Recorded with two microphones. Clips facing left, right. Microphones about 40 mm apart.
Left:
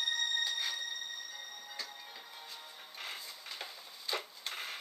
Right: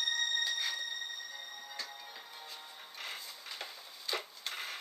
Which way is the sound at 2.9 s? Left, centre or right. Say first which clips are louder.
Even; centre.